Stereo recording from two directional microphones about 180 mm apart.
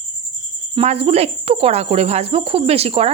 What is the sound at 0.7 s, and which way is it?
Speech, 35° right (ahead or behind).